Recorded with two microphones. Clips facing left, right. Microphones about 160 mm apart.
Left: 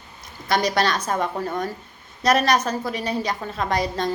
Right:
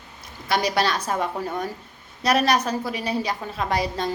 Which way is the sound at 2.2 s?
45° left (ahead or behind).